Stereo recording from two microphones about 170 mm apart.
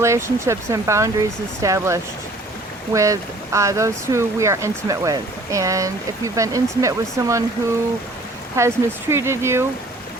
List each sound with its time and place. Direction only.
0.0 s speech: 15° right (ahead or behind)
8.5 s speech: 15° right (ahead or behind)